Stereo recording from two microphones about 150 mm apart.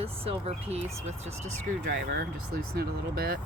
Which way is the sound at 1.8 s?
90° right.